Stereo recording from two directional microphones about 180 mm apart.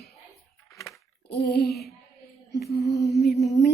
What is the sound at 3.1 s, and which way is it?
Child singing, 65° left (ahead or behind).